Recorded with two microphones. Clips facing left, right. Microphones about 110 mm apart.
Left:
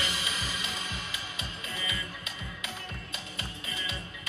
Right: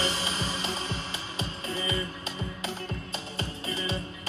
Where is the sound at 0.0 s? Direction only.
30° right (ahead or behind).